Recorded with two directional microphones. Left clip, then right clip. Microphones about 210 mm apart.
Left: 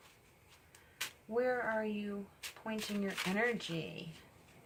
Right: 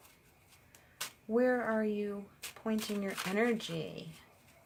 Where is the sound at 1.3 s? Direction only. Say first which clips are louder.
Right 4 dB; 30° right (ahead or behind).